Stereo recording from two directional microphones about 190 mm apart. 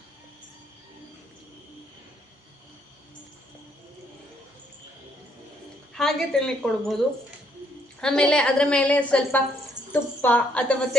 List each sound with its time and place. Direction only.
5.9 s a woman's voice: centre (ahead or behind)
8.0 s a woman's voice: 5° left (ahead or behind)